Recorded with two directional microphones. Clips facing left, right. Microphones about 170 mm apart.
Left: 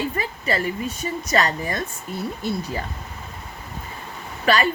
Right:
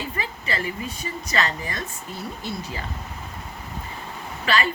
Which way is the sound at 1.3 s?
40° left (ahead or behind).